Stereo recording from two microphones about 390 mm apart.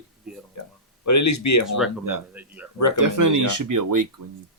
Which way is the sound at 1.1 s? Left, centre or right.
Left.